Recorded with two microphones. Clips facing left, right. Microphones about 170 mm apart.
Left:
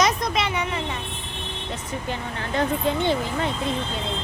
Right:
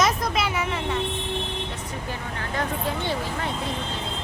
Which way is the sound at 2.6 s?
20° left (ahead or behind).